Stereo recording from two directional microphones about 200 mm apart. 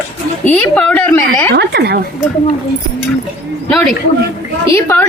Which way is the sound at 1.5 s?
55° right (ahead or behind).